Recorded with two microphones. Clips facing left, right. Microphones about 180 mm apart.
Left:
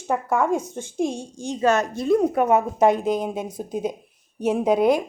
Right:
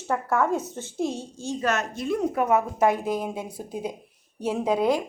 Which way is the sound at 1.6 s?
35° left (ahead or behind).